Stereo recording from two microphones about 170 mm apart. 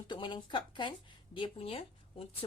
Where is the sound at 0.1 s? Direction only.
25° left (ahead or behind).